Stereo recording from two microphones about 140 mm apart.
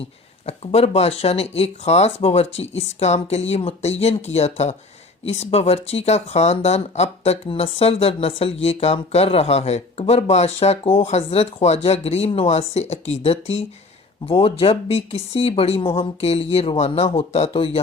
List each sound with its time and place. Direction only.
0.4 s speech: 45° left (ahead or behind)